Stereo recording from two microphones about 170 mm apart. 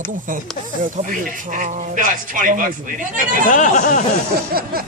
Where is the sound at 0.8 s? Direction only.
50° right (ahead or behind).